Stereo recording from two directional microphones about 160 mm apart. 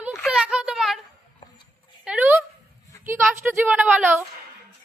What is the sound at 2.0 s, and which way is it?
A woman's voice, 10° right (ahead or behind).